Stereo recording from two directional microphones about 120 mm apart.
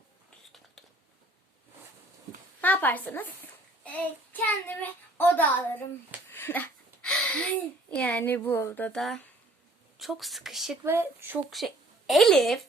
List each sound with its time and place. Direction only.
2.6 s a woman's voice: 15° left (ahead or behind)
9.0 s speech: centre (ahead or behind)
10.8 s speech: 20° right (ahead or behind)
11.5 s a woman's voice: centre (ahead or behind)